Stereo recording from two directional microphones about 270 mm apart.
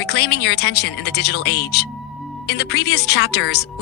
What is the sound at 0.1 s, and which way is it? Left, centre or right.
Speech, left.